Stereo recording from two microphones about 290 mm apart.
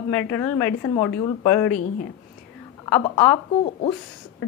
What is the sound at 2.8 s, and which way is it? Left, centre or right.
Speech, centre.